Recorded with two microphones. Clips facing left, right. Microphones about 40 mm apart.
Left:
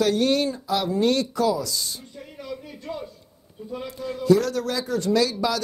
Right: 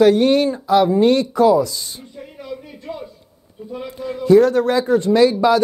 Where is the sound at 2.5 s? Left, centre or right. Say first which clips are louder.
Right 2 dB; centre.